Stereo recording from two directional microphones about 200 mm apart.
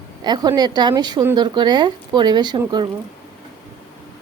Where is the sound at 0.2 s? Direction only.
20° right (ahead or behind).